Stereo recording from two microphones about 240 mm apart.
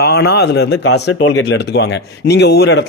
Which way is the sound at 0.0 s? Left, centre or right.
Left.